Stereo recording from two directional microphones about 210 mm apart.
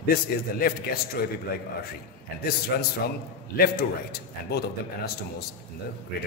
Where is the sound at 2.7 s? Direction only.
50° left (ahead or behind).